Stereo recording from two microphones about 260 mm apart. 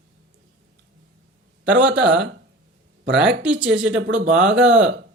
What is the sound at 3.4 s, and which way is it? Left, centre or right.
Speech, centre.